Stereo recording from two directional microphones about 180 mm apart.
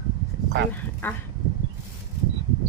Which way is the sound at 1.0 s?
10° left (ahead or behind).